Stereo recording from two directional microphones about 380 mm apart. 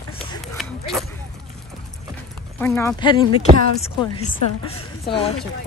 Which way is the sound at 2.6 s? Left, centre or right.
Centre.